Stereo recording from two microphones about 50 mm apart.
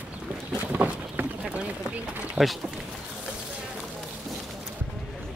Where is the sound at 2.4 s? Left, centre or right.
Centre.